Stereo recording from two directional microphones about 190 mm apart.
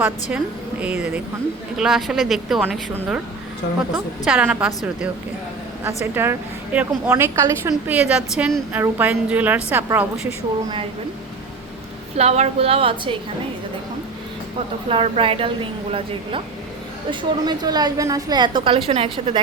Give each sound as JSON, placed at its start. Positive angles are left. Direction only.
{"t": 0.0, "sound": "a woman's voice", "side_deg": -5}
{"t": 4.3, "sound": "a woman's voice", "side_deg": -5}
{"t": 6.2, "sound": "a woman's voice", "side_deg": -10}
{"t": 12.1, "sound": "a woman's voice", "side_deg": -35}
{"t": 14.8, "sound": "a woman's voice", "side_deg": -30}